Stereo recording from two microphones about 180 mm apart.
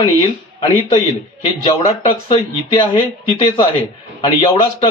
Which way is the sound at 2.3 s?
30° left (ahead or behind).